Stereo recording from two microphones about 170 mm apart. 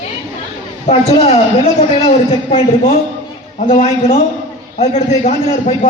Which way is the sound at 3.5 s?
45° left (ahead or behind).